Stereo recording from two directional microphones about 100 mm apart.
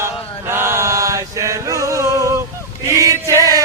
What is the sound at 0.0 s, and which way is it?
Chant, 25° right (ahead or behind).